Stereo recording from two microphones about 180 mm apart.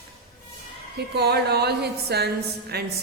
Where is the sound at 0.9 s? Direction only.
65° right (ahead or behind).